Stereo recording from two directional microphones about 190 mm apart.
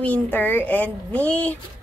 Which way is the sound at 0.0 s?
10° left (ahead or behind).